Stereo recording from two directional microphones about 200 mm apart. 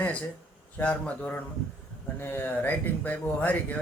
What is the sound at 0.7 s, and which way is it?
Speech, 5° left (ahead or behind).